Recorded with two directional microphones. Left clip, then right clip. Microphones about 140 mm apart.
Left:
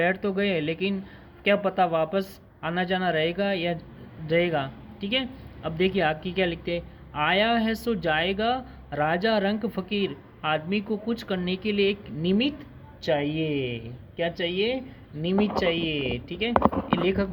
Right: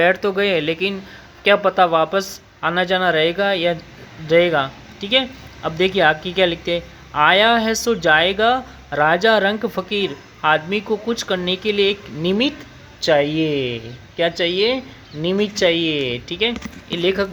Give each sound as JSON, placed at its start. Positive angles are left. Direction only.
{"t": 0.0, "sound": "speech", "side_deg": -30}
{"t": 13.0, "sound": "speech", "side_deg": -60}